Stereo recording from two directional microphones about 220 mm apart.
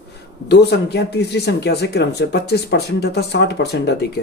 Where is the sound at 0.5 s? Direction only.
50° left (ahead or behind).